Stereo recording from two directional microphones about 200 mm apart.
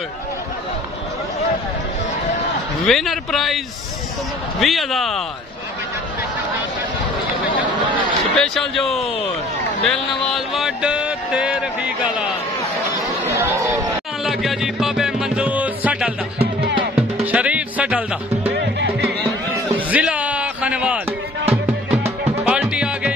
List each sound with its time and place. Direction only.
2.9 s a man's voice: centre (ahead or behind)
8.4 s a man's voice: centre (ahead or behind)
9.8 s a sound: centre (ahead or behind)
14.2 s music: centre (ahead or behind)
17.2 s music: 5° right (ahead or behind)
18.5 s music: 55° right (ahead or behind)
19.9 s a sound: 5° right (ahead or behind)
22.5 s music: 5° right (ahead or behind)